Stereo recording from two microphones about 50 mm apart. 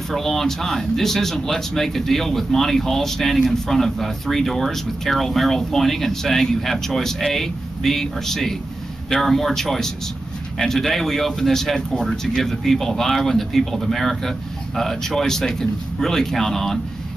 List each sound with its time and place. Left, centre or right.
0.1 s speech: centre
12.0 s speech: centre
12.4 s a man's voice: centre